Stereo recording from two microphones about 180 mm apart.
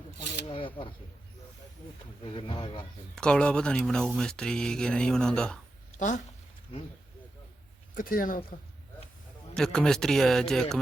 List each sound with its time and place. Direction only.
0.5 s speech: 30° left (ahead or behind)
2.2 s speech: 30° left (ahead or behind)
3.2 s speech: 5° left (ahead or behind)
7.9 s speech: 50° left (ahead or behind)
9.6 s speech: 5° left (ahead or behind)